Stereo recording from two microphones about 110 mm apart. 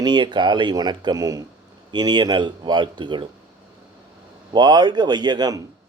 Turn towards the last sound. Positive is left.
turn(degrees=-40)  # may be behind; listen again after turning